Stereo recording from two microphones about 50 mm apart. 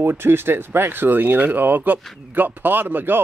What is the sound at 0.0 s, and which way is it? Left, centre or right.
Speech, right.